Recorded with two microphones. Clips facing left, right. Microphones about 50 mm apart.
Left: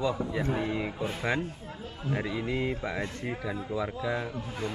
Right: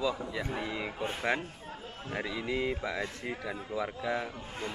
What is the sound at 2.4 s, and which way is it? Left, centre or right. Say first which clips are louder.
Speech: left 1 dB; centre.